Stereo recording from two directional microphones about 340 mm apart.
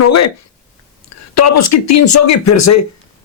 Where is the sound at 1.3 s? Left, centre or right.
Left.